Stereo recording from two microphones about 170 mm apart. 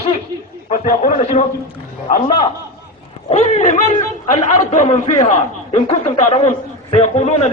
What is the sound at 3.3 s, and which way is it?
A man's voice, 45° left (ahead or behind).